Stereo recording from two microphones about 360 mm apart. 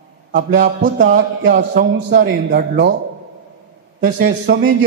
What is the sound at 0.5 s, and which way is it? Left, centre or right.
A man's voice, right.